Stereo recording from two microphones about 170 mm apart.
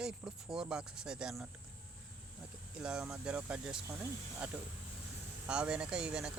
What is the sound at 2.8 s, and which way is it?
Speech, 5° right (ahead or behind).